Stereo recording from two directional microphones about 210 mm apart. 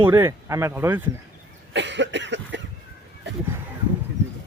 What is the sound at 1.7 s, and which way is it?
Cough, 55° right (ahead or behind).